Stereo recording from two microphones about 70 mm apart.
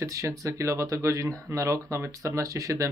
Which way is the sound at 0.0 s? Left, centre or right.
Right.